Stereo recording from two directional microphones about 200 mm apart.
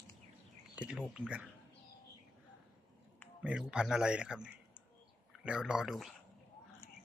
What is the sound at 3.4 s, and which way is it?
A man's voice, 5° right (ahead or behind).